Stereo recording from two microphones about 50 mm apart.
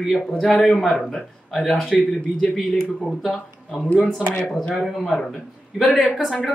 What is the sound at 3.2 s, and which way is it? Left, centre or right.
Speech, centre.